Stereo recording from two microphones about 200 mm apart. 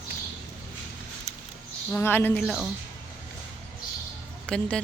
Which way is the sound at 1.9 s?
10° left (ahead or behind).